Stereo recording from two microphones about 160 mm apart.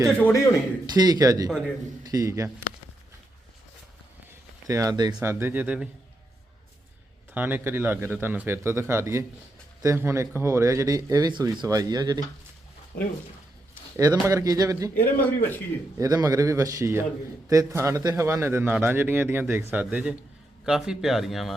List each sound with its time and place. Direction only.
0.1 s speech: 10° left (ahead or behind)
0.9 s speech: 25° right (ahead or behind)
4.6 s a man's voice: 20° right (ahead or behind)
7.3 s a man's voice: 10° right (ahead or behind)
12.9 s speech: 70° left (ahead or behind)
13.9 s speech: 20° right (ahead or behind)
15.0 s speech: 10° left (ahead or behind)
16.0 s a man's voice: 20° right (ahead or behind); by 21.5 s centre (ahead or behind)